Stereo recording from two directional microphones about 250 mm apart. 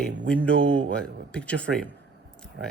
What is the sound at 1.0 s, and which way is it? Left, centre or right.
Speech, centre.